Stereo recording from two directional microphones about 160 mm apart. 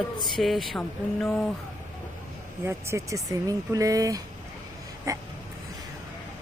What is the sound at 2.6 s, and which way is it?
Speech, 15° right (ahead or behind).